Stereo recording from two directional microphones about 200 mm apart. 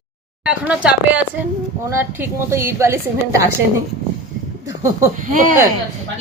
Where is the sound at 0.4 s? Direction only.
5° right (ahead or behind).